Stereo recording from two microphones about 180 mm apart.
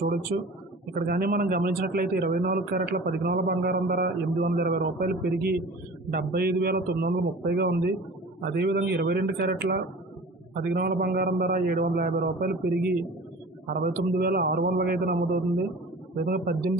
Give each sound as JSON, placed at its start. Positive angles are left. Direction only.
{"t": 0.9, "sound": "a man's voice", "side_deg": -55}